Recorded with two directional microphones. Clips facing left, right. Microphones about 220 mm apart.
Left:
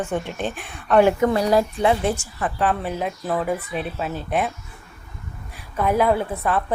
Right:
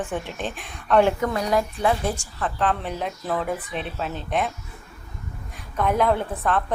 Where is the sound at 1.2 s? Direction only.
30° left (ahead or behind).